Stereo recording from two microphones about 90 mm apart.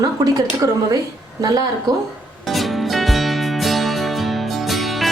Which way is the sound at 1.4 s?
45° right (ahead or behind).